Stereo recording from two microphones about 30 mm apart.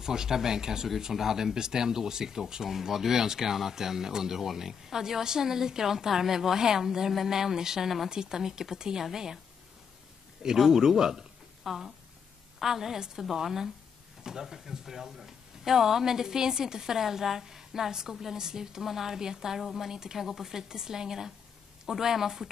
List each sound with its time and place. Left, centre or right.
0.0 s speech: right
10.4 s speech: centre
11.6 s speech: centre
20.2 s speech: centre
20.4 s speech: centre